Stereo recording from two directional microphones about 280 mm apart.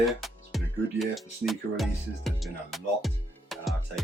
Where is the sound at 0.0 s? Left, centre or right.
Centre.